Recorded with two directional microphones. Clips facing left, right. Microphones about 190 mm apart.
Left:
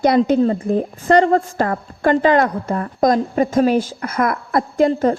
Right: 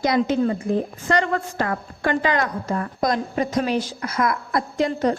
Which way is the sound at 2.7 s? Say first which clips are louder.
Left 6 dB; 40° left (ahead or behind).